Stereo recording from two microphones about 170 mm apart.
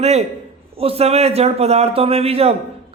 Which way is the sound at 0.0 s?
40° right (ahead or behind).